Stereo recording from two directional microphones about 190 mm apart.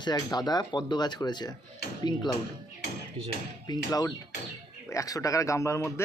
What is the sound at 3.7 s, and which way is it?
A man's voice, 20° left (ahead or behind).